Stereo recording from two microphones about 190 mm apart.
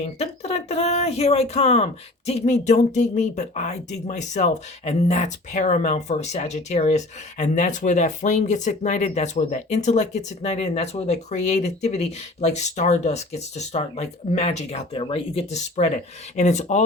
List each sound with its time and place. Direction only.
0.2 s speech: 35° left (ahead or behind)